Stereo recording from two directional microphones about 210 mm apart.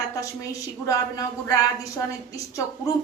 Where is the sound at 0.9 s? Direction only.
15° left (ahead or behind).